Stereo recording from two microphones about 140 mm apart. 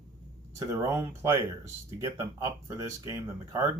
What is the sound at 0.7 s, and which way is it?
Speech, 20° right (ahead or behind).